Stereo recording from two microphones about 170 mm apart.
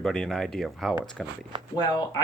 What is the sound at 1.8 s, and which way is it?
Speech, 25° left (ahead or behind).